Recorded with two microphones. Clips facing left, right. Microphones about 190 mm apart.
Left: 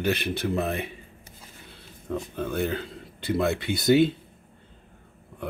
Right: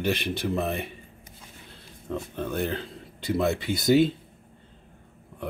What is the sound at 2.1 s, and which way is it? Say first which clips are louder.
Speech: left 1 dB; centre (ahead or behind).